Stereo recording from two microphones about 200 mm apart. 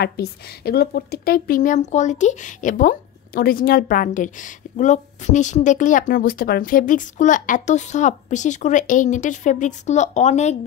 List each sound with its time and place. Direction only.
0.0 s a woman's voice: 55° left (ahead or behind); by 10.6 s 35° left (ahead or behind)